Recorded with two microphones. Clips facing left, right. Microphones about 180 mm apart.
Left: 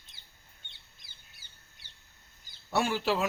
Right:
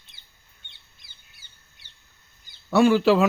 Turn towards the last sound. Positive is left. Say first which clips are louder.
# right 11 dB
turn(degrees=-90)